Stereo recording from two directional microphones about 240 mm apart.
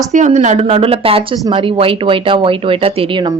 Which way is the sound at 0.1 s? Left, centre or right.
Right.